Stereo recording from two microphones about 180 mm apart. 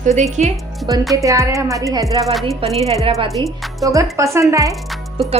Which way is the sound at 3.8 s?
20° right (ahead or behind).